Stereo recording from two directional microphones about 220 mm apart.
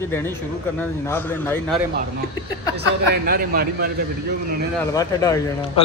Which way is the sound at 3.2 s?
45° right (ahead or behind).